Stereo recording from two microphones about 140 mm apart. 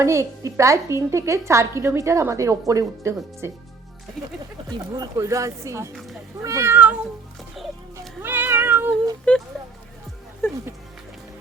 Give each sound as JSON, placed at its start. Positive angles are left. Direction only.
{"t": 0.0, "sound": "a woman's voice", "side_deg": -20}
{"t": 4.7, "sound": "a woman's voice", "side_deg": -25}
{"t": 7.9, "sound": "cat", "side_deg": -15}
{"t": 9.3, "sound": "speech", "side_deg": 10}
{"t": 10.4, "sound": "speech", "side_deg": 15}